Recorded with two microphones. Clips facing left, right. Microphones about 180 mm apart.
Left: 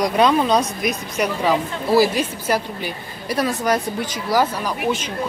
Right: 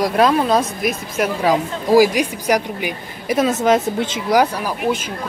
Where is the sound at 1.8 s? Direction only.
15° right (ahead or behind).